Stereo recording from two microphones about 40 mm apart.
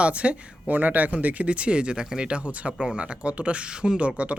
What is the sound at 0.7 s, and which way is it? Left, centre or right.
Speech, right.